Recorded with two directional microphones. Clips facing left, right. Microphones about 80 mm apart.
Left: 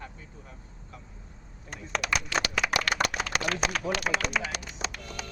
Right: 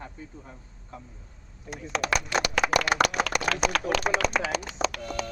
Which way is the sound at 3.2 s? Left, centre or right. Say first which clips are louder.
Right 4 dB; right.